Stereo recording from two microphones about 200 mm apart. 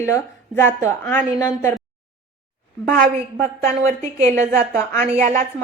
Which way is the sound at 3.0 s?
45° right (ahead or behind).